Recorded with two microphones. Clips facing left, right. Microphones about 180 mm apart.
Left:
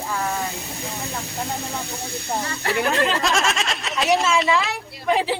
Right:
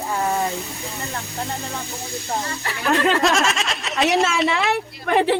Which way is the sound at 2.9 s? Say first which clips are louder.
Right 6 dB; 60° right (ahead or behind).